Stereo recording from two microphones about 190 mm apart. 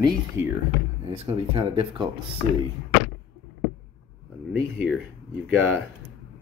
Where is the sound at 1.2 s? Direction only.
30° right (ahead or behind).